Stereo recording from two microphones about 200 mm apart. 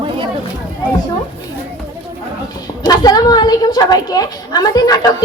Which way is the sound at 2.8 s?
20° left (ahead or behind).